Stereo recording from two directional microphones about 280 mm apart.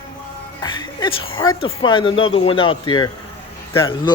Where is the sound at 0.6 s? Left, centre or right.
Centre.